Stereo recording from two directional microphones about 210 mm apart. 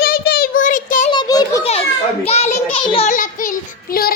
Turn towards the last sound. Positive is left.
turn(degrees=35)  # may be behind; listen again after turning